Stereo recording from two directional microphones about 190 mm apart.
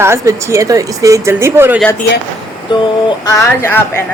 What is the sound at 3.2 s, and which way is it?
Speech, 15° left (ahead or behind).